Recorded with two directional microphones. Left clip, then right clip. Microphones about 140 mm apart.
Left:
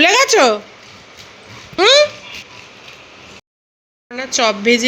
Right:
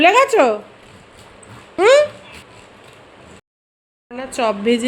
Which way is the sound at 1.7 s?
5° right (ahead or behind).